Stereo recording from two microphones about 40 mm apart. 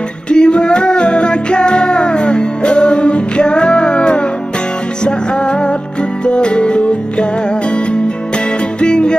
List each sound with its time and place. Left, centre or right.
0.3 s music: left
8.8 s music: left